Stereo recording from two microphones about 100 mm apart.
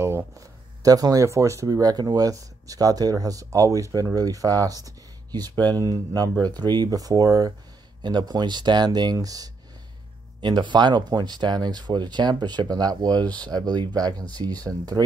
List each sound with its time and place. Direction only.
0.4 s speech: 35° right (ahead or behind)